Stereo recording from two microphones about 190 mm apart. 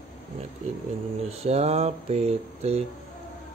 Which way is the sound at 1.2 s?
35° right (ahead or behind).